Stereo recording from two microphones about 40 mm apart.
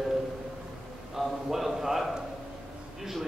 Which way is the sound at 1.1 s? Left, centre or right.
Centre.